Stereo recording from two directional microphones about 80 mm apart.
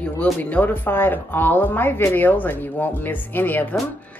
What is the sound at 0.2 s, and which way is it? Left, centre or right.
A woman's voice, centre.